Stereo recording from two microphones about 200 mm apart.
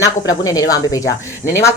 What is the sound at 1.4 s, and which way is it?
Speech, 35° left (ahead or behind).